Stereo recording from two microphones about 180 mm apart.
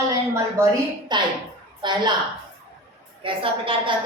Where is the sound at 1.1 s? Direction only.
25° right (ahead or behind).